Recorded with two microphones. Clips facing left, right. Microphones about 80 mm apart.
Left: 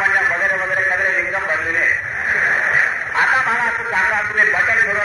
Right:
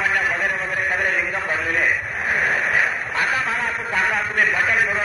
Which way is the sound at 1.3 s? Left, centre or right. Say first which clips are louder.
Left 3 dB; left.